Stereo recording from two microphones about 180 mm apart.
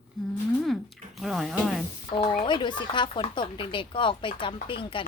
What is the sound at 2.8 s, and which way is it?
Speech, 25° left (ahead or behind).